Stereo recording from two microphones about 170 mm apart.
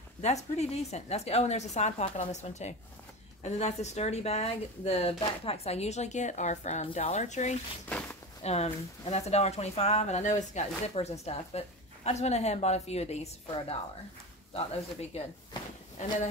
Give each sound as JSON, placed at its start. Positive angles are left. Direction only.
{"t": 0.2, "sound": "a woman's voice", "side_deg": 40}